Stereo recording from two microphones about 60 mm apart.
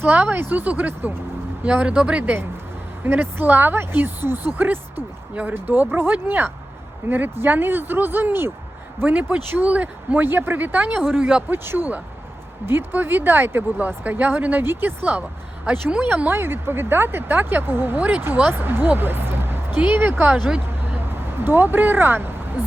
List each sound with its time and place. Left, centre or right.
0.0 s speech: right
3.0 s speech: right
5.3 s speech: right
9.0 s speech: right
10.2 s speech: right; by 11.4 s centre
11.4 s speech: right
16.0 s speech: right